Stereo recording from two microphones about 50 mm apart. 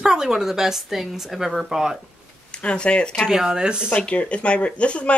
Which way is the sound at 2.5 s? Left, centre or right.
Centre.